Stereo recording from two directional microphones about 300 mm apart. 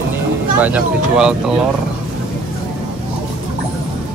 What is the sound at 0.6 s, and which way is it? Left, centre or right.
Speech, centre.